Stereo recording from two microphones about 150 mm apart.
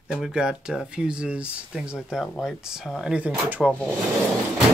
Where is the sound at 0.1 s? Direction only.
5° right (ahead or behind).